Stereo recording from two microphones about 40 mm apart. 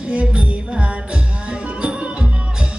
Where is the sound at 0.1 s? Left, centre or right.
Right.